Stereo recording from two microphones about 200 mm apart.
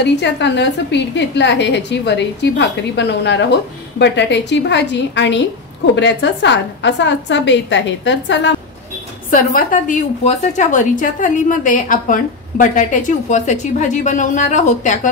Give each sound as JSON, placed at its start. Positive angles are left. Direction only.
{"t": 0.0, "sound": "a woman's voice", "side_deg": 60}
{"t": 9.3, "sound": "a woman's voice", "side_deg": 40}